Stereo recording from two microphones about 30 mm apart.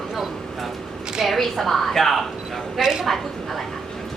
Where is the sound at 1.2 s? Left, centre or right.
Centre.